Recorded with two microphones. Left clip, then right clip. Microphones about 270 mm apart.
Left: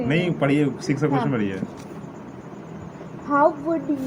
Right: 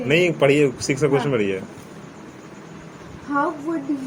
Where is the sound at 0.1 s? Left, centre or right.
Centre.